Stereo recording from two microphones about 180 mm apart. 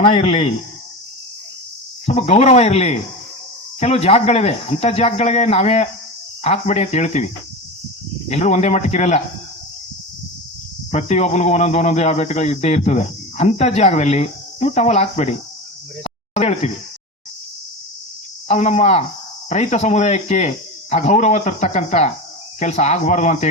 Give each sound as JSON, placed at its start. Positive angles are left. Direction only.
{"t": 0.0, "sound": "speech", "side_deg": 35}
{"t": 2.0, "sound": "speech", "side_deg": 40}
{"t": 8.3, "sound": "speech", "side_deg": 40}
{"t": 10.9, "sound": "speech", "side_deg": 40}
{"t": 16.0, "sound": "cricket", "side_deg": 35}
{"t": 18.4, "sound": "speech", "side_deg": 40}